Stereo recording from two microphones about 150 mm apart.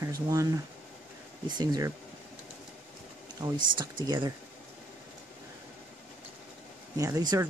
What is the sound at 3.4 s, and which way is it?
Speech, 30° right (ahead or behind).